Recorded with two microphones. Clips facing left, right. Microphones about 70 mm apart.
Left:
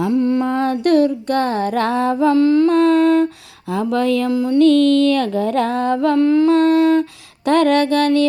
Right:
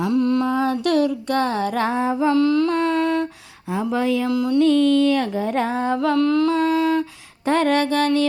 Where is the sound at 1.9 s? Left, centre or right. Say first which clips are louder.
Left 5 dB; left.